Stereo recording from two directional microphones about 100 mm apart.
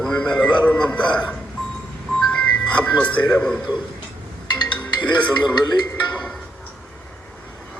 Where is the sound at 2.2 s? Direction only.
10° left (ahead or behind).